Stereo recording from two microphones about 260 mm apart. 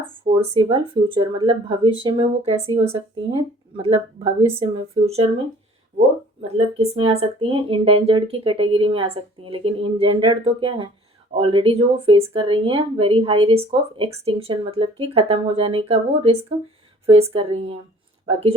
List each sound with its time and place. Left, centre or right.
0.3 s speech: right
6.6 s speech: right